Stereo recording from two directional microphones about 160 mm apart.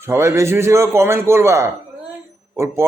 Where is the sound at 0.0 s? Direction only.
15° right (ahead or behind).